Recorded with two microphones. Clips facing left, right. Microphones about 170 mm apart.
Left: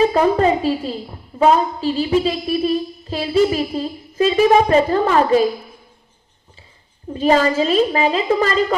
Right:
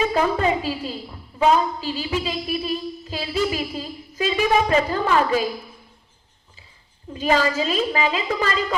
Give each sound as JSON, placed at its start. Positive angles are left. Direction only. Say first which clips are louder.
{"t": 0.0, "sound": "a woman's voice", "louder": "left 6 dB", "side_deg": 35}
{"t": 7.1, "sound": "a woman's voice", "louder": "left 5 dB", "side_deg": 35}